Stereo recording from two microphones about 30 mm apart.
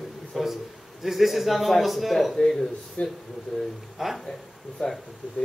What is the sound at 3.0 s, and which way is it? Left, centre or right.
Speech, left.